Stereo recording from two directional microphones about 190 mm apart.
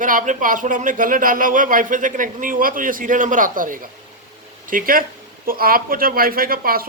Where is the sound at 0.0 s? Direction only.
45° right (ahead or behind).